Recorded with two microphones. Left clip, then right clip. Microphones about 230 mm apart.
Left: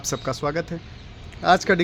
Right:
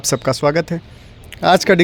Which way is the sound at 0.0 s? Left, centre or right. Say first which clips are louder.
Right 10 dB; right.